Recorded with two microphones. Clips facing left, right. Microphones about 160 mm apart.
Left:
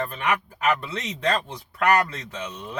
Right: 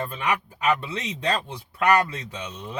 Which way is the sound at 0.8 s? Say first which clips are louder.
Left 1 dB; 15° right (ahead or behind).